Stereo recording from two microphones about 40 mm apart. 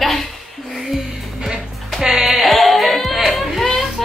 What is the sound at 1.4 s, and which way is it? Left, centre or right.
Music, centre.